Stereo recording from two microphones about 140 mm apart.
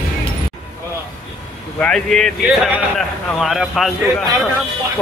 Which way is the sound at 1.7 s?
5° left (ahead or behind).